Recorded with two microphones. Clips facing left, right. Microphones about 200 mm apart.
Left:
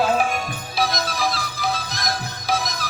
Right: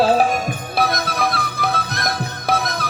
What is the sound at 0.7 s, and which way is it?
Music, 60° right (ahead or behind).